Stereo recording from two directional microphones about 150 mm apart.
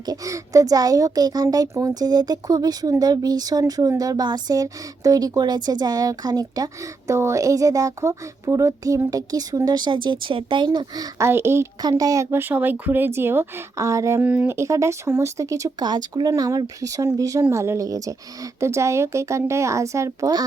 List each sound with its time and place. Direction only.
0.0 s speech: 25° right (ahead or behind)